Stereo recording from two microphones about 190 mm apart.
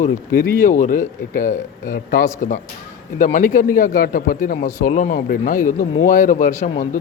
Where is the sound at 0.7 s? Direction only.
45° left (ahead or behind).